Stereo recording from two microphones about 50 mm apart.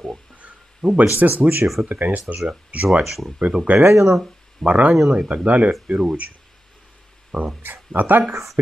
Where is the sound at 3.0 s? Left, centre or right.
Centre.